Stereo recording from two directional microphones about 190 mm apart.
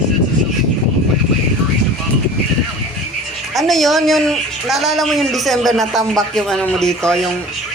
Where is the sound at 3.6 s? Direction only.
Centre (ahead or behind).